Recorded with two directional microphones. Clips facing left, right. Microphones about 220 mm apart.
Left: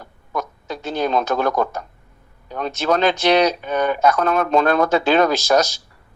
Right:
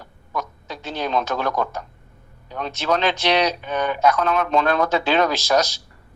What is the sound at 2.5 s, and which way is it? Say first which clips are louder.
A man's voice: left 3 dB; 45° left (ahead or behind).